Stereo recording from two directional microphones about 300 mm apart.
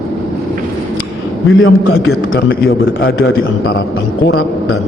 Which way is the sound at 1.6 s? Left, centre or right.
Left.